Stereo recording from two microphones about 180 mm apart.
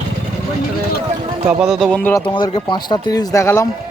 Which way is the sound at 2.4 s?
25° left (ahead or behind).